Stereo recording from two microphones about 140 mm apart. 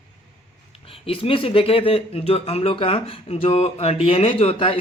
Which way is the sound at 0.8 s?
40° left (ahead or behind).